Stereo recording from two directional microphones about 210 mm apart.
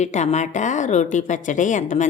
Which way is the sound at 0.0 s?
35° left (ahead or behind).